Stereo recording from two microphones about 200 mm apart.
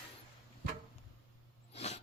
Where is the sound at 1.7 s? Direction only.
30° left (ahead or behind).